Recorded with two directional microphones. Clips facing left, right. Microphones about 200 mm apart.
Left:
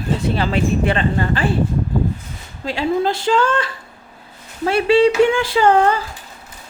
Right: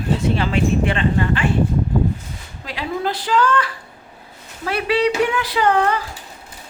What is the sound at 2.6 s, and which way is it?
A woman's voice, 25° left (ahead or behind).